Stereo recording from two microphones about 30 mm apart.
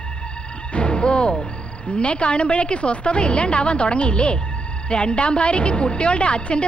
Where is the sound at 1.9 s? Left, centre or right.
Left.